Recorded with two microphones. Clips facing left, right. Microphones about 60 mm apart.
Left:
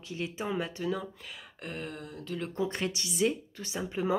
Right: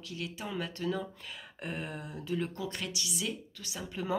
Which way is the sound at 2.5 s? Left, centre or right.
Left.